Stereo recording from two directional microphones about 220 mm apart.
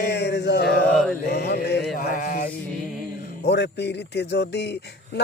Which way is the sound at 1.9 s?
35° left (ahead or behind).